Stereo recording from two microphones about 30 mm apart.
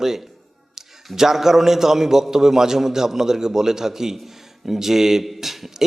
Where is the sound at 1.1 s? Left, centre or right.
Centre.